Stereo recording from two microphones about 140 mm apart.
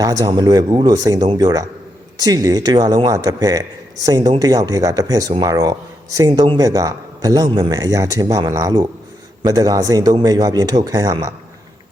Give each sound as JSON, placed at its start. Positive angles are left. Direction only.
{"t": 0.0, "sound": "speech", "side_deg": -25}